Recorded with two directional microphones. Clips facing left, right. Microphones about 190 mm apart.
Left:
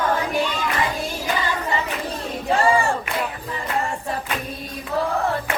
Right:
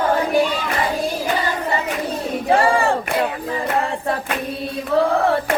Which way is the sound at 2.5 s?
55° right (ahead or behind).